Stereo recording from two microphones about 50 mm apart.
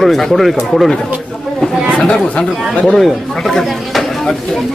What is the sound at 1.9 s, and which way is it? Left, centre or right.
Speech, centre.